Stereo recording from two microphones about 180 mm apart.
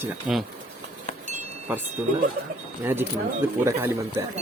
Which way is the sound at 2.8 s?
10° right (ahead or behind).